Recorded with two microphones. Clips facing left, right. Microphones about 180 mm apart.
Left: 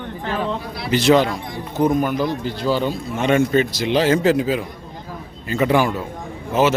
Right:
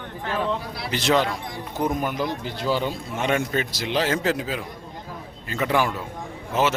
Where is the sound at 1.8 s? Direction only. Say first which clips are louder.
Left 7 dB; 20° right (ahead or behind).